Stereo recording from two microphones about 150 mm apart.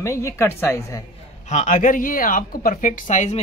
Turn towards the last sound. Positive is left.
turn(degrees=50)  # may be behind; listen again after turning